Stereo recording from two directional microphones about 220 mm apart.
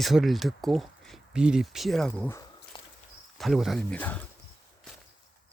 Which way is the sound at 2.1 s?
15° left (ahead or behind).